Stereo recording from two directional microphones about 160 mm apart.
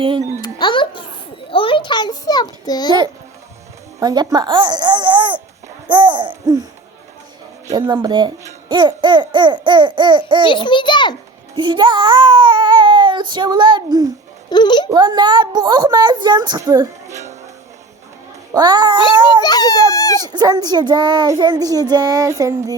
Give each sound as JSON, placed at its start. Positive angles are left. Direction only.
{"t": 0.0, "sound": "speech", "side_deg": -30}
{"t": 0.4, "sound": "a child's voice", "side_deg": 30}
{"t": 4.0, "sound": "speech", "side_deg": -25}
{"t": 7.7, "sound": "speech", "side_deg": -25}
{"t": 10.4, "sound": "a child's voice", "side_deg": 30}
{"t": 11.5, "sound": "speech", "side_deg": -30}
{"t": 14.5, "sound": "a child's voice", "side_deg": 25}
{"t": 14.8, "sound": "speech", "side_deg": -25}
{"t": 18.5, "sound": "speech", "side_deg": -25}
{"t": 19.4, "sound": "a sound", "side_deg": 25}
{"t": 19.9, "sound": "dog", "side_deg": 20}
{"t": 20.2, "sound": "speech", "side_deg": -25}